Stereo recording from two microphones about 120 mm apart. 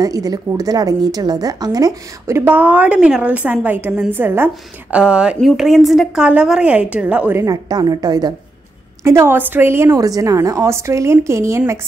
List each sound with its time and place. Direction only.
0.0 s a woman's voice: 30° right (ahead or behind); by 7.4 s 15° right (ahead or behind)
7.4 s a woman's voice: 35° right (ahead or behind)
9.0 s a woman's voice: 20° right (ahead or behind)